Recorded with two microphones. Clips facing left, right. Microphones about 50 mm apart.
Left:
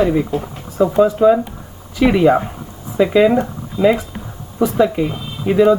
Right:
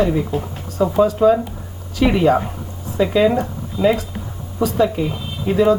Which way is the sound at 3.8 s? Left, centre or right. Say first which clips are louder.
Left 3 dB; left.